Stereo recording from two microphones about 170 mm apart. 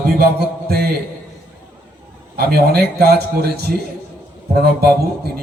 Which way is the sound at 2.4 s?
65° right (ahead or behind).